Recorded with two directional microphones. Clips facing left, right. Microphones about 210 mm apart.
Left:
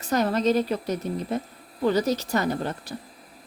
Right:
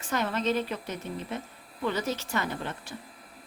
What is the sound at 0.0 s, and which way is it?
A woman's voice, 40° left (ahead or behind).